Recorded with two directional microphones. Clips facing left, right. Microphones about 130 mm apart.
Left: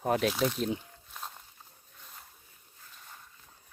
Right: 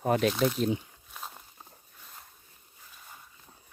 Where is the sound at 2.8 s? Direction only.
5° right (ahead or behind).